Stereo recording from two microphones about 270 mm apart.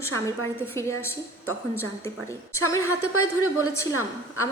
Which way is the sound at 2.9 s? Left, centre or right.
Left.